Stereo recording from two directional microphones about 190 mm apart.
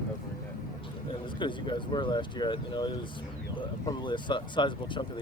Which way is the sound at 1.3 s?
25° left (ahead or behind).